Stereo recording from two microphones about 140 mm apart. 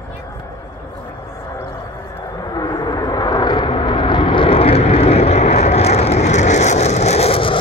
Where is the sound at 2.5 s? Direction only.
30° left (ahead or behind).